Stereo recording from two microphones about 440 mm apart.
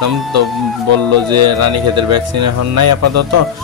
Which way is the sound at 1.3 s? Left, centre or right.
Right.